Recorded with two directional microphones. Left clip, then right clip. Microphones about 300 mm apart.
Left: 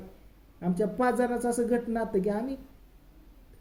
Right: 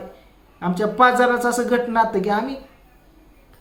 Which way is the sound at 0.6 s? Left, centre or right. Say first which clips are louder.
Right 11 dB; centre.